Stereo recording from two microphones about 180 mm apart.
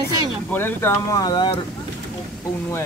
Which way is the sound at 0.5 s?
10° left (ahead or behind).